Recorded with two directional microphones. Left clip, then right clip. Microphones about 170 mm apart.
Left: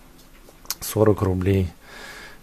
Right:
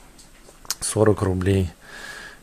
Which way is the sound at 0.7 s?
Centre (ahead or behind).